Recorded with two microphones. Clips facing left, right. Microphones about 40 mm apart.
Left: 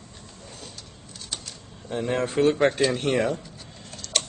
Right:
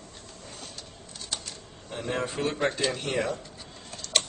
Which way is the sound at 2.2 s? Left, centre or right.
Left.